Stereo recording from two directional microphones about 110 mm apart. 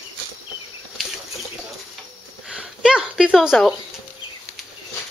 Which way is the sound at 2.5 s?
10° right (ahead or behind).